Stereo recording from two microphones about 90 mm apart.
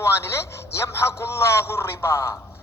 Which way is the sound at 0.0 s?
30° left (ahead or behind).